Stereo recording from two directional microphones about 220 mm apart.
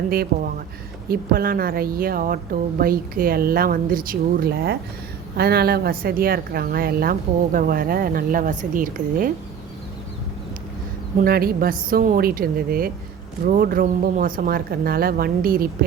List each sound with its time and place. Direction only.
1.0 s a woman's voice: 45° right (ahead or behind)
11.2 s speech: 45° right (ahead or behind)